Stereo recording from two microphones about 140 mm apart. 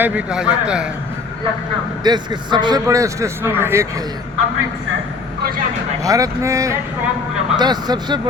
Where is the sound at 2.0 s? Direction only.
30° right (ahead or behind); by 3.8 s 15° right (ahead or behind).